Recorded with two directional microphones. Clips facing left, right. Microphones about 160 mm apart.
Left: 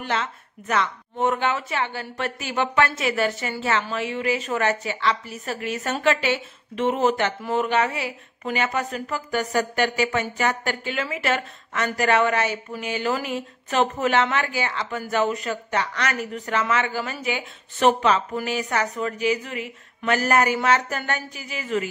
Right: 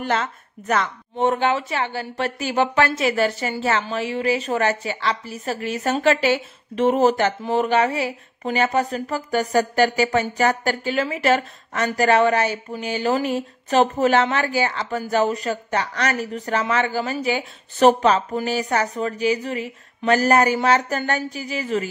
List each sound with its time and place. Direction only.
0.0 s speech: 45° right (ahead or behind)
1.2 s a woman's voice: 30° right (ahead or behind)